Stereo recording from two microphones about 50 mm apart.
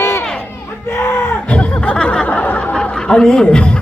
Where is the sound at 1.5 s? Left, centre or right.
Left.